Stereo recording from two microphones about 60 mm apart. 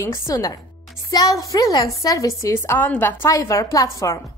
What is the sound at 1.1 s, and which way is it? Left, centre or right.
A woman's voice, left.